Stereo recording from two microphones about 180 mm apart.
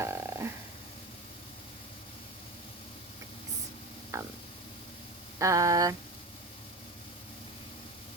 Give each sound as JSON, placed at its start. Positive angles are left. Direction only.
{"t": 0.0, "sound": "snoring", "side_deg": -15}
{"t": 4.1, "sound": "stomach rumble", "side_deg": -15}
{"t": 5.4, "sound": "a sound", "side_deg": -15}